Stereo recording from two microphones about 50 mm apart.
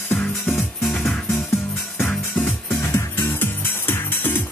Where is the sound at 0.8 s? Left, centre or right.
Centre.